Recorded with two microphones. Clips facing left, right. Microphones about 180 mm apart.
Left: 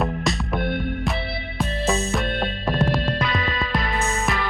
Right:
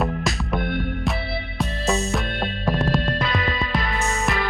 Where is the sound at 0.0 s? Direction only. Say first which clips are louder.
Even; centre (ahead or behind).